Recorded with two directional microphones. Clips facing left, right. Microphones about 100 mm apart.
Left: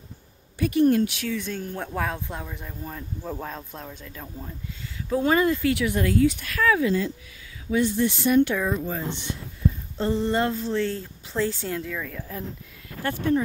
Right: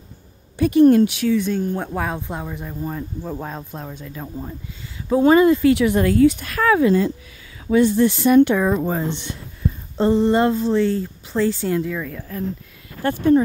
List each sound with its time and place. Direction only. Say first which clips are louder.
0.6 s a sound: right 7 dB; 30° right (ahead or behind)
1.0 s speech: right 9 dB; 15° right (ahead or behind)
2.2 s speech: right 6 dB; 25° right (ahead or behind)
5.9 s speech: right 6 dB; 45° right (ahead or behind)
7.6 s speech: right 7 dB; 70° right (ahead or behind)
8.0 s speech: right 5 dB; 50° right (ahead or behind)
9.0 s speech: right 6 dB; 80° right
9.9 s speech: right 9 dB; 25° right (ahead or behind)
13.0 s speech: right 8 dB; 35° right (ahead or behind)